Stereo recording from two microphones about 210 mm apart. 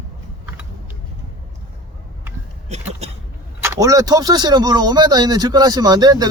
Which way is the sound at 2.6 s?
30° right (ahead or behind).